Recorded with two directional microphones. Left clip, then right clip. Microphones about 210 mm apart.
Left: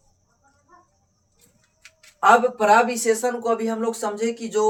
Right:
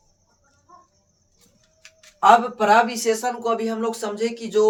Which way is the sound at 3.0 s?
30° right (ahead or behind).